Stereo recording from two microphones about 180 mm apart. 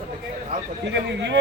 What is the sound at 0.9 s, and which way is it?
Speech, 75° right (ahead or behind).